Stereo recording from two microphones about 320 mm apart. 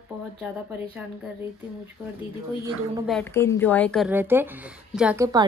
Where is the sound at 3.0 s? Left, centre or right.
Centre.